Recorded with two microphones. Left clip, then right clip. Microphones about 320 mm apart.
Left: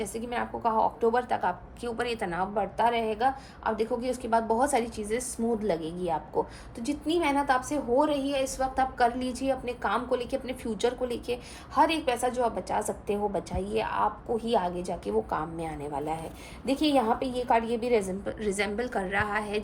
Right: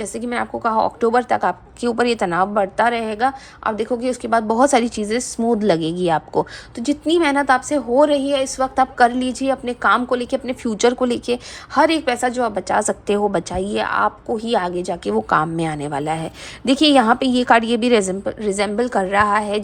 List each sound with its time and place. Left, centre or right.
0.0 s a woman's voice: right
18.3 s a woman's voice: centre